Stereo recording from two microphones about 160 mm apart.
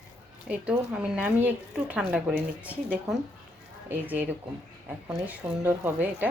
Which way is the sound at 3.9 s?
10° right (ahead or behind).